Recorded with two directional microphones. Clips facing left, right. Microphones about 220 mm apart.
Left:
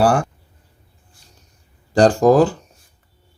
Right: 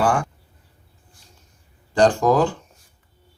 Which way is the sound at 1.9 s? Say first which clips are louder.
Left 4 dB; 40° left (ahead or behind).